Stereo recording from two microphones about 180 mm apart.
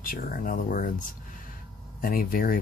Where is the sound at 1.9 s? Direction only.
50° left (ahead or behind).